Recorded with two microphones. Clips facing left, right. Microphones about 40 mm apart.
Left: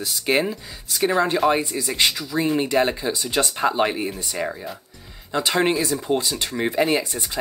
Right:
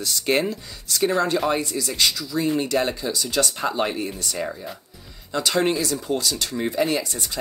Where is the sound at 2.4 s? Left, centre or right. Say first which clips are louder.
Left 2 dB; centre.